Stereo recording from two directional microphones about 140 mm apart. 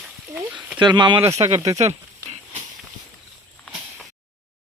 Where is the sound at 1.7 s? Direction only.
55° right (ahead or behind).